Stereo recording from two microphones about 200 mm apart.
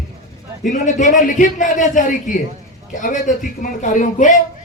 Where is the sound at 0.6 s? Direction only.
40° left (ahead or behind).